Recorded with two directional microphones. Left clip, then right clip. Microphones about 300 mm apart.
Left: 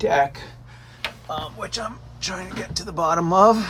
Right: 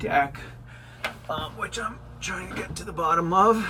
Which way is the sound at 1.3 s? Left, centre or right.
Centre.